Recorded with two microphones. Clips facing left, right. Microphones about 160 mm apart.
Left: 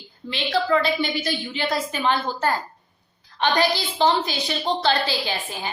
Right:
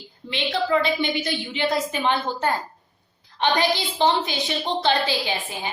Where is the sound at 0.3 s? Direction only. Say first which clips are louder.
Left 1 dB; 20° right (ahead or behind).